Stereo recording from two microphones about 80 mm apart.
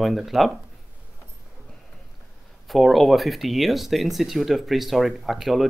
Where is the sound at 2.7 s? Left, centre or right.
Centre.